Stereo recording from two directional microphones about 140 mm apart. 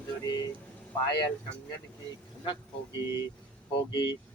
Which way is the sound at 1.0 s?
30° left (ahead or behind).